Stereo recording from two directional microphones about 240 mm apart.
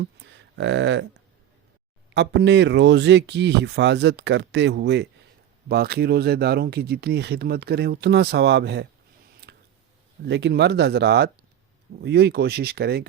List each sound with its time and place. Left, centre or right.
0.0 s speech: right
2.1 s speech: right
9.4 s a sound: right
10.2 s speech: right